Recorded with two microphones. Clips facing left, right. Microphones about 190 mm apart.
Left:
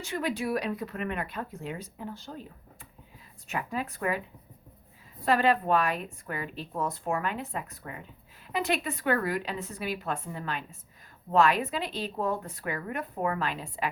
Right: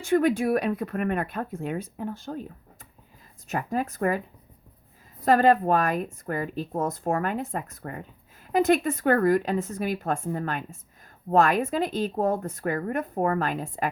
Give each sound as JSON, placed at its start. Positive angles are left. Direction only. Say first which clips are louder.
{"t": 0.0, "sound": "a woman's voice", "louder": "right 9 dB", "side_deg": -50}
{"t": 3.5, "sound": "a woman's voice", "louder": "right 5 dB", "side_deg": -45}
{"t": 5.2, "sound": "a woman's voice", "louder": "right 5 dB", "side_deg": -45}